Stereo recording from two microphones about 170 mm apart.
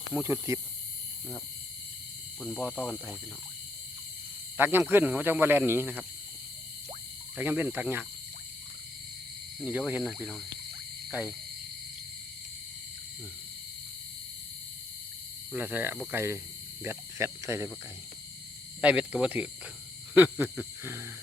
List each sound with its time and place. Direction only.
0.1 s speech: 15° right (ahead or behind)
2.4 s speech: 5° right (ahead or behind)
4.5 s speech: 15° right (ahead or behind)
7.3 s speech: 10° right (ahead or behind)
9.6 s speech: 10° right (ahead or behind)
15.5 s speech: 10° right (ahead or behind)
18.8 s speech: 10° right (ahead or behind)